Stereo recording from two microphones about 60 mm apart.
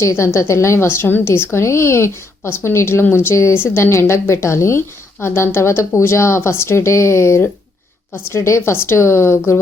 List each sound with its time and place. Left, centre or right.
0.0 s a woman's voice: left